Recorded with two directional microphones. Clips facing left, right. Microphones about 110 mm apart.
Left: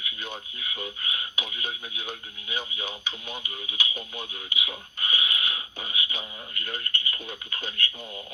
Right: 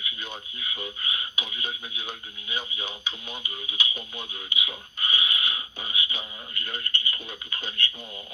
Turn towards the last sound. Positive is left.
turn(degrees=45)  # may be behind; listen again after turning